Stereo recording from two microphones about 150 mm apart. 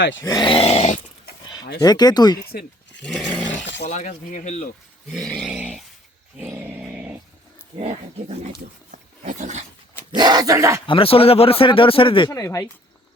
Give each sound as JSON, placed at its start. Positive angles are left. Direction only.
{"t": 0.2, "sound": "speech", "side_deg": 25}
{"t": 1.8, "sound": "speech", "side_deg": 25}
{"t": 3.0, "sound": "roar", "side_deg": 5}
{"t": 3.8, "sound": "speech", "side_deg": 55}
{"t": 5.4, "sound": "dog", "side_deg": -5}
{"t": 6.3, "sound": "a sound", "side_deg": -10}
{"t": 7.8, "sound": "speech", "side_deg": -45}
{"t": 8.9, "sound": "roaring cats", "side_deg": -55}
{"t": 10.2, "sound": "speech", "side_deg": -25}
{"t": 10.8, "sound": "speech", "side_deg": 40}
{"t": 12.3, "sound": "speech", "side_deg": 20}